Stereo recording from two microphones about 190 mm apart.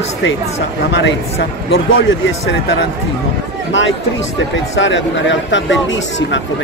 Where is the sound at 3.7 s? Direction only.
80° left.